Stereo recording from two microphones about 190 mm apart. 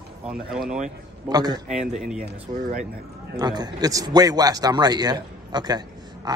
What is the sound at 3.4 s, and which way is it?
A man's voice, 20° right (ahead or behind).